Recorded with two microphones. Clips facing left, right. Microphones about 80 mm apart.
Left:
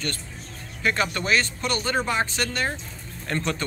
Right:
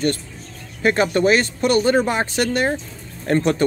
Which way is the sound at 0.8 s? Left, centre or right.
Right.